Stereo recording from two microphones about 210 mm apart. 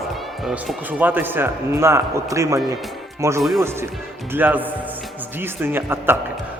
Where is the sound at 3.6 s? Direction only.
10° right (ahead or behind).